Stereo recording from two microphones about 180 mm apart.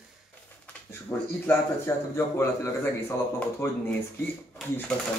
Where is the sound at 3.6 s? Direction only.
15° left (ahead or behind).